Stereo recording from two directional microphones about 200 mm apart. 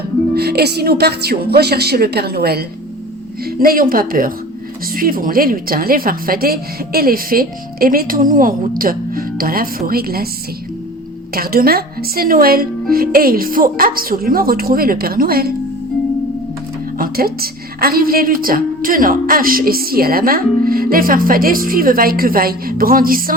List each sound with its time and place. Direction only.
0.3 s a woman's voice: 55° right (ahead or behind)
11.3 s a woman's voice: 50° right (ahead or behind)
17.0 s a woman's voice: 50° right (ahead or behind)